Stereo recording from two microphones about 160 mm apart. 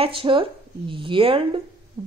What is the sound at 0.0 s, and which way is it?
Speech, 35° right (ahead or behind).